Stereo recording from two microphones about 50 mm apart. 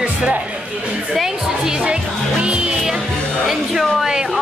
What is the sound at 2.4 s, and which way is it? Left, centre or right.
Music, right.